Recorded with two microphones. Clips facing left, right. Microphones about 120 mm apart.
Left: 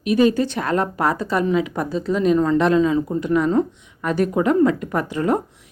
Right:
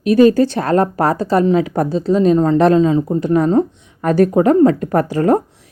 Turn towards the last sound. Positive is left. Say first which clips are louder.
# right 6 dB
turn(degrees=-40)  # may be behind; listen again after turning